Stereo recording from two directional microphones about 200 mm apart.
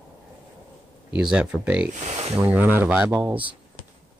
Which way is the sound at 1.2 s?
5° right (ahead or behind).